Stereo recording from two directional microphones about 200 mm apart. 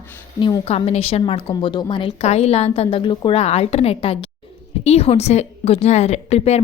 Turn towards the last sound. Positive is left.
turn(degrees=30)  # may be behind; listen again after turning